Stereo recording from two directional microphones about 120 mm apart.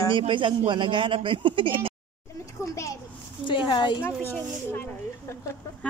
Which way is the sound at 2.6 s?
25° left (ahead or behind).